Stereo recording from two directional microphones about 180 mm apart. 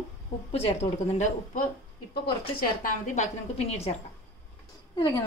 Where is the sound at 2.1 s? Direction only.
60° left (ahead or behind); by 4.0 s 35° left (ahead or behind).